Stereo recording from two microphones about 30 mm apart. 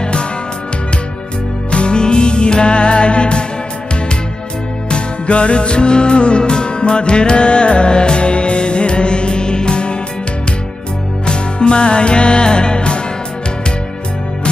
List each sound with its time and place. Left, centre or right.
0.0 s music: left
1.7 s music: left
4.8 s music: left
11.2 s music: left